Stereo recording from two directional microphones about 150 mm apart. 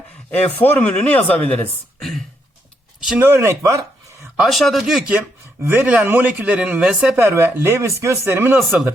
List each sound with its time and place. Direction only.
0.3 s speech: 10° left (ahead or behind)
3.2 s speech: 15° right (ahead or behind)
4.4 s speech: centre (ahead or behind)
7.2 s speech: 15° right (ahead or behind)